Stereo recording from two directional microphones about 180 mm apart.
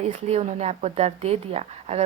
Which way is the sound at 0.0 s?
35° right (ahead or behind).